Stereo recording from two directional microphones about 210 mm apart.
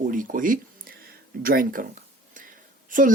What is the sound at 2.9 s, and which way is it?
Speech, 40° right (ahead or behind).